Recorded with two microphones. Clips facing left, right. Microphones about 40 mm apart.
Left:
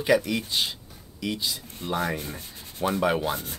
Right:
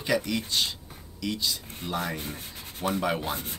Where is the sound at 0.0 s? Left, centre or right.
Centre.